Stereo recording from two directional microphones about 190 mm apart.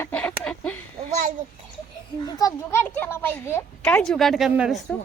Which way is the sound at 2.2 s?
20° left (ahead or behind).